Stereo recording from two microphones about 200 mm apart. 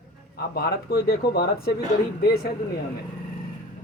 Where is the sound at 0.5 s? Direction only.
50° left (ahead or behind).